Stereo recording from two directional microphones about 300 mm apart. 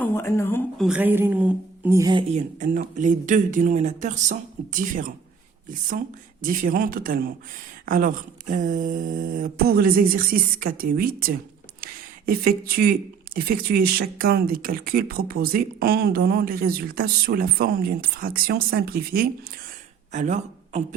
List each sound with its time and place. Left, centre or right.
0.0 s a woman's voice: centre; by 5.1 s right
6.4 s a woman's voice: right